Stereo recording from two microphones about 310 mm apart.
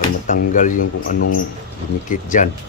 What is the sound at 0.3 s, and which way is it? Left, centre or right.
Speech, left.